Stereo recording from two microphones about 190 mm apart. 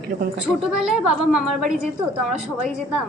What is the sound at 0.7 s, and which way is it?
A woman's voice, 5° right (ahead or behind).